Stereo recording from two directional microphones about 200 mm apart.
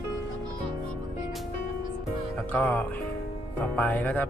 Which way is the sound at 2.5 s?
10° left (ahead or behind).